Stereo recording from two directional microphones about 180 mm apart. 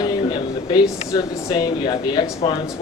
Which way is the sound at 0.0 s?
20° left (ahead or behind).